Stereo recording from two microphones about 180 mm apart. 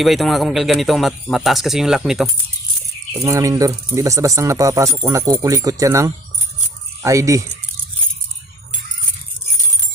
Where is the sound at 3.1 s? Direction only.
15° right (ahead or behind).